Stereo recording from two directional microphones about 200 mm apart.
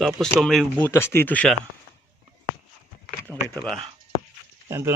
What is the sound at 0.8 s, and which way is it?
Speech, 10° left (ahead or behind).